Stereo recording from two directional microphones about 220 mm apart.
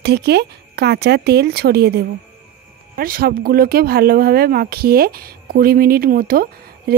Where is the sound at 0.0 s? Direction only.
50° right (ahead or behind).